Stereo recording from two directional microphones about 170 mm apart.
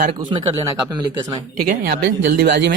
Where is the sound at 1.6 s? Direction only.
60° right (ahead or behind).